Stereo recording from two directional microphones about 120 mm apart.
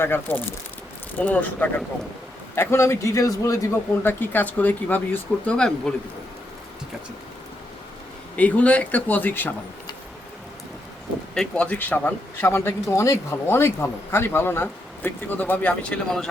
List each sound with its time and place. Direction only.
0.0 s a man's voice: 15° left (ahead or behind)
8.4 s a man's voice: 10° left (ahead or behind)
11.3 s a man's voice: 10° left (ahead or behind)